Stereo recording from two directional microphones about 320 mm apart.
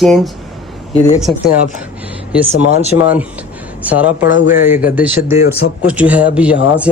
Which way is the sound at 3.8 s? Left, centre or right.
Centre.